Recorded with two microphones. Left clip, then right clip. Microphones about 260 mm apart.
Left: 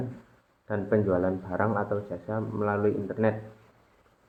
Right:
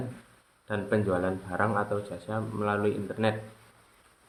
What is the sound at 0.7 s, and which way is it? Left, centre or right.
Speech, right.